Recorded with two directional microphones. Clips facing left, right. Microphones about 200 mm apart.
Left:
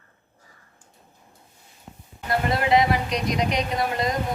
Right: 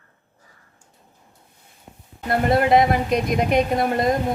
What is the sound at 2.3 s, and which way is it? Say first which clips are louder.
Speech: right 4 dB; 50° right (ahead or behind).